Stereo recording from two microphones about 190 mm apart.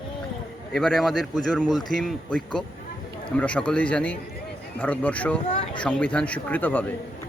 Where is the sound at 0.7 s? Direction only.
Centre (ahead or behind).